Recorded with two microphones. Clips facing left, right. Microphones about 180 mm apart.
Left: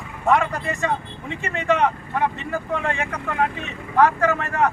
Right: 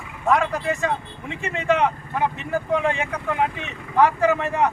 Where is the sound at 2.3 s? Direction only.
15° right (ahead or behind).